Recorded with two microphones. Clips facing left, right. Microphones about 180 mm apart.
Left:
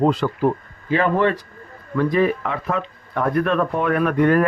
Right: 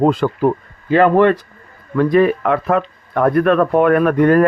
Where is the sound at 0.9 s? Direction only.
65° right (ahead or behind).